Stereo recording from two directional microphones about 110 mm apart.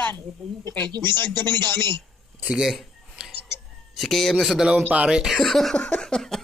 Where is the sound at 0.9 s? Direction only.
40° right (ahead or behind).